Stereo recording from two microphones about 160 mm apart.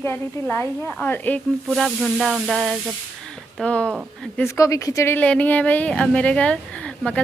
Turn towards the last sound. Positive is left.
turn(degrees=5)  # may be behind; listen again after turning